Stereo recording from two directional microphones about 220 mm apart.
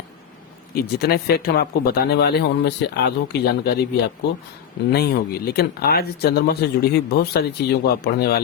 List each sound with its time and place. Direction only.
0.7 s speech: 45° left (ahead or behind)
4.9 s speech: 45° left (ahead or behind)